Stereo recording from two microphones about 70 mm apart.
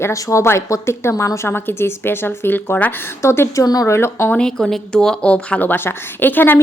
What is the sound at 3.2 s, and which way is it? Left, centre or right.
A woman's voice, left.